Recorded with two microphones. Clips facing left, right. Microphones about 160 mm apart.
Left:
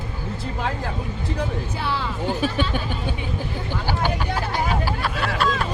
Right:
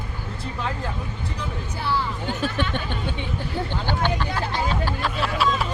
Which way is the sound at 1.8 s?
90° left.